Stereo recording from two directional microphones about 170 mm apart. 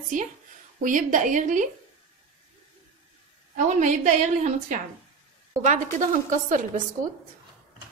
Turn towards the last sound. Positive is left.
turn(degrees=-50)  # may be behind; listen again after turning